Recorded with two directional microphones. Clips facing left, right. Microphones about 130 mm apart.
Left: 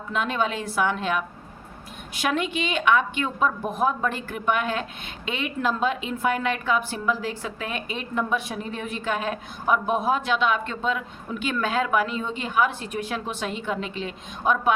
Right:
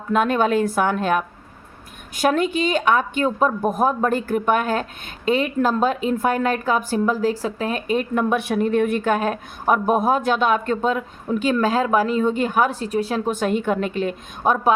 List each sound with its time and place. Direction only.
0.1 s a woman's voice: 50° right (ahead or behind)